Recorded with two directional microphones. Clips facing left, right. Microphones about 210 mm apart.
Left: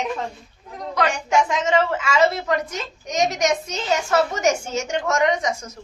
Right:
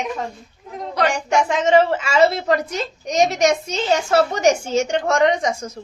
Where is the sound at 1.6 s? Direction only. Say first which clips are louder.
Right 5 dB; 30° right (ahead or behind).